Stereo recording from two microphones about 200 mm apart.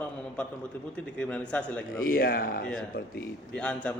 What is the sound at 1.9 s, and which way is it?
Speech, 45° left (ahead or behind).